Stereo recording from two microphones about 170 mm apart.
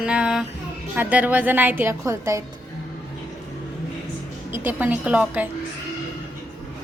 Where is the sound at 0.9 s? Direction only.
10° right (ahead or behind).